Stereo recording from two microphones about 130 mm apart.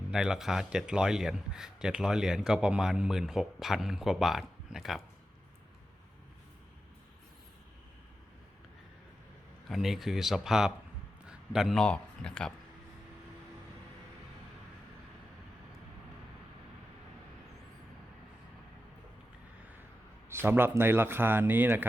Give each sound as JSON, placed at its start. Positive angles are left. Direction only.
{"t": 0.1, "sound": "a man's voice", "side_deg": -5}
{"t": 9.6, "sound": "a man's voice", "side_deg": 0}
{"t": 20.3, "sound": "speech", "side_deg": -15}